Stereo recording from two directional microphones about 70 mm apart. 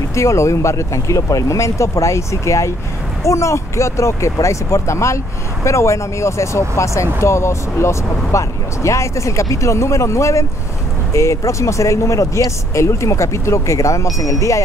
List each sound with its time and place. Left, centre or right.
0.1 s speech: left